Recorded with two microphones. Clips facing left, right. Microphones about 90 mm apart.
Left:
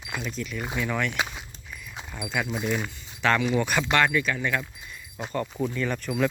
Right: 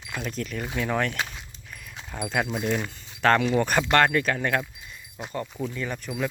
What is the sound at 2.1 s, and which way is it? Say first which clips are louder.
Speech: right 2 dB; 50° right (ahead or behind).